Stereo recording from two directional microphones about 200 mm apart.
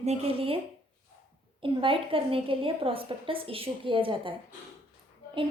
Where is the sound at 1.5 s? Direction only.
25° right (ahead or behind).